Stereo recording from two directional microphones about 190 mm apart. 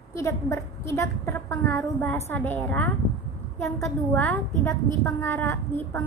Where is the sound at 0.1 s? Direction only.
15° left (ahead or behind).